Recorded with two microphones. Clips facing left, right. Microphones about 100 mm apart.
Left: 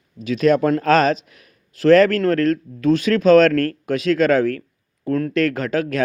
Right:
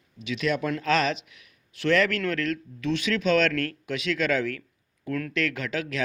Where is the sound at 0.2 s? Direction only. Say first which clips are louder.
Left 11 dB; 40° left (ahead or behind).